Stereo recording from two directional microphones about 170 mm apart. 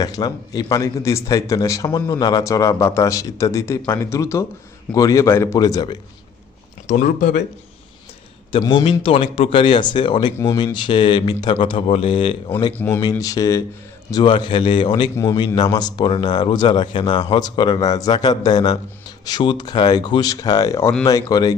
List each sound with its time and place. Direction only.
0.0 s a man's voice: 20° left (ahead or behind)
6.8 s speech: 50° left (ahead or behind)
8.8 s a man's voice: 35° left (ahead or behind)
13.0 s a man's voice: 20° left (ahead or behind)